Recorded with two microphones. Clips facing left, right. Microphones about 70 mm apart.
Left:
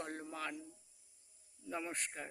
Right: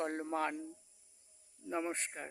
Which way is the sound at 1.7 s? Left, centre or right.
Right.